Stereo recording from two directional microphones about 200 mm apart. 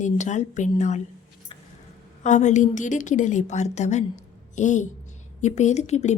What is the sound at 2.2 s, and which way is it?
Speech, 35° left (ahead or behind).